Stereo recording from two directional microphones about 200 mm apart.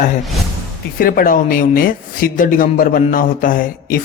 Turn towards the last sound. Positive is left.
turn(degrees=45)  # may be behind; listen again after turning